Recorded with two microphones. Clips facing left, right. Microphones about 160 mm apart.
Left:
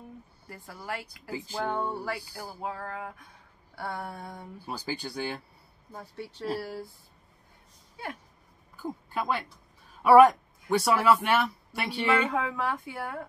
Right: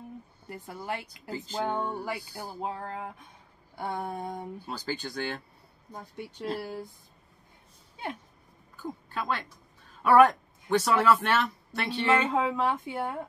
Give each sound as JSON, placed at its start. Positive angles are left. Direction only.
{"t": 0.9, "sound": "speech", "side_deg": -20}
{"t": 1.3, "sound": "speech", "side_deg": 10}
{"t": 2.0, "sound": "speech", "side_deg": -15}
{"t": 4.6, "sound": "speech", "side_deg": 10}
{"t": 5.9, "sound": "speech", "side_deg": -15}
{"t": 8.7, "sound": "speech", "side_deg": 10}
{"t": 12.3, "sound": "speech", "side_deg": -25}